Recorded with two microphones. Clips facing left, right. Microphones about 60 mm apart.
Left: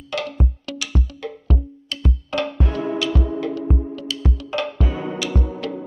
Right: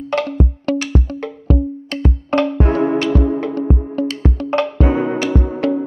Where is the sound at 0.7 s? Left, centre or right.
Right.